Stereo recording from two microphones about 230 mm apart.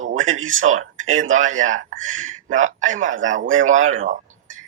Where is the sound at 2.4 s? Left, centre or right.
Right.